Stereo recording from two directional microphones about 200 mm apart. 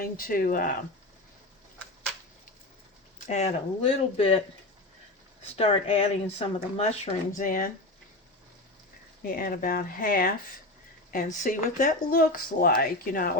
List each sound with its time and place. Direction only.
0.0 s speech: 45° left (ahead or behind)
3.2 s speech: 35° left (ahead or behind)
5.5 s speech: 30° left (ahead or behind)
9.2 s speech: 45° left (ahead or behind)